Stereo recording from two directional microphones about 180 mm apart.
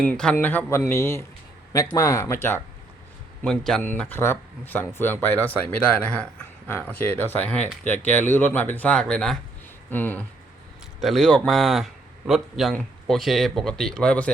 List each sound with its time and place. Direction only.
0.0 s speech: 5° left (ahead or behind)